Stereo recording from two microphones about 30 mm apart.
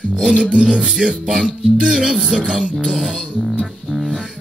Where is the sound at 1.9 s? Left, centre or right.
Centre.